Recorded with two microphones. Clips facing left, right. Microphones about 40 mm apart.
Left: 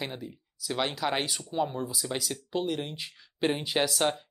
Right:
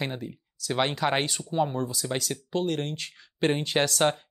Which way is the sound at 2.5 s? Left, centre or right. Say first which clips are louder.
Right 3 dB; centre.